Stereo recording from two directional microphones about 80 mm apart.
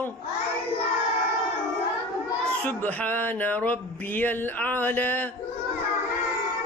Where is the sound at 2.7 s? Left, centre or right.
Left.